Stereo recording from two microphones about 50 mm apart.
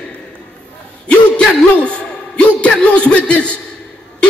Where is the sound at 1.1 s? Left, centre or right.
Left.